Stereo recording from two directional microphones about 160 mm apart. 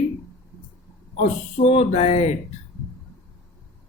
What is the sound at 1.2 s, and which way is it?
Speech, 45° left (ahead or behind).